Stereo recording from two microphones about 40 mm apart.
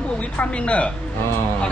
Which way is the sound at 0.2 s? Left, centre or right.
Left.